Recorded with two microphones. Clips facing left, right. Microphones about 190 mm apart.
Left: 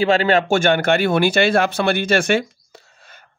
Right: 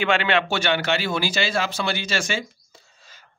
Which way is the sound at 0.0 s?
40° left (ahead or behind).